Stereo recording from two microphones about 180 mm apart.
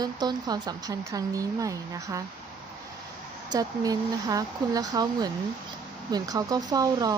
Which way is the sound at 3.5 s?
20° right (ahead or behind).